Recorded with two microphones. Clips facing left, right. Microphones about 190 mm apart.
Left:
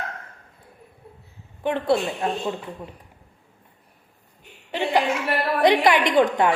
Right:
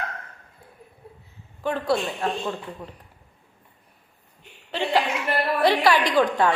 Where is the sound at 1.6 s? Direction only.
20° left (ahead or behind).